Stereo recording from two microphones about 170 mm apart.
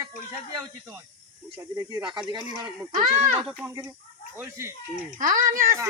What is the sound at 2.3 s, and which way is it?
Speech, 25° right (ahead or behind).